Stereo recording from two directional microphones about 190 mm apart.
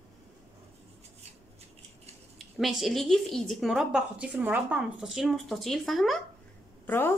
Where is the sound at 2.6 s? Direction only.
Centre (ahead or behind).